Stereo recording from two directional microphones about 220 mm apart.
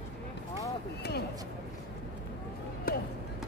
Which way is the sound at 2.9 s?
40° left (ahead or behind).